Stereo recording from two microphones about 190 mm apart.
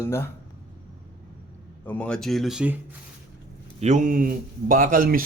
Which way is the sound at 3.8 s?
40° right (ahead or behind).